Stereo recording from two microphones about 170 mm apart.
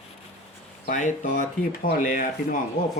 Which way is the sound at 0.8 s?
50° left (ahead or behind).